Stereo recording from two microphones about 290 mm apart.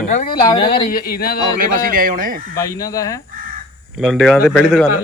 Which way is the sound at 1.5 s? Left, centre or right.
Right.